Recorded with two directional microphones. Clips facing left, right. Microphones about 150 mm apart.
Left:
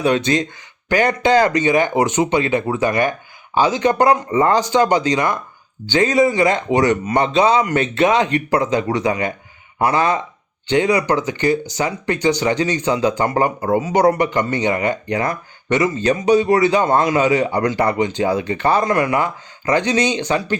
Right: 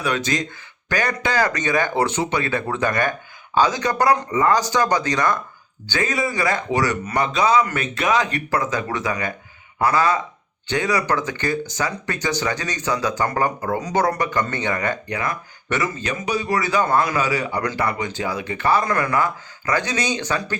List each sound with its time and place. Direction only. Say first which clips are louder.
0.0 s speech: left 6 dB; 25° left (ahead or behind)
13.7 s speech: left 7 dB; 10° left (ahead or behind)
14.2 s speech: left 5 dB; 20° left (ahead or behind)
15.1 s speech: left 5 dB; 30° left (ahead or behind)
15.7 s speech: left 7 dB; 20° left (ahead or behind)